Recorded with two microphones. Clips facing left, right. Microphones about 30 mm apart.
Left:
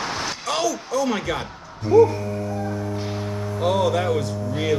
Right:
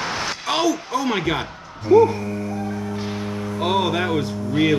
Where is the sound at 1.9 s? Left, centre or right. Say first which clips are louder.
Right 1 dB; right.